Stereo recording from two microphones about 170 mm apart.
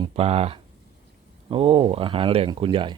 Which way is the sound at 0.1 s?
40° right (ahead or behind).